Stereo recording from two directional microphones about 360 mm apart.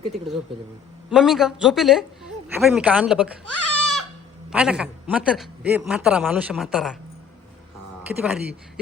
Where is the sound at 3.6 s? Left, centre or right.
Left.